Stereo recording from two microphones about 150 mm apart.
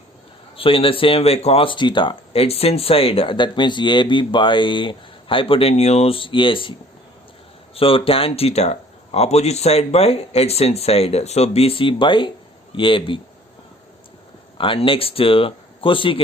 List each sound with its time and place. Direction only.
0.5 s speech: 35° left (ahead or behind)
7.8 s speech: 40° left (ahead or behind)
14.6 s speech: 35° left (ahead or behind)